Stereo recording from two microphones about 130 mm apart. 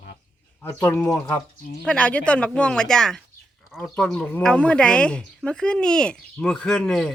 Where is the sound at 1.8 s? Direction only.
10° left (ahead or behind).